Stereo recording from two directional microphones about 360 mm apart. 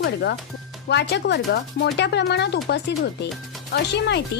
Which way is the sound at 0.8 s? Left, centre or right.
Left.